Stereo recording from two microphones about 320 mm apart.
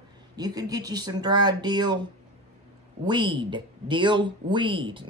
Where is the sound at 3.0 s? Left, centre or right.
Centre.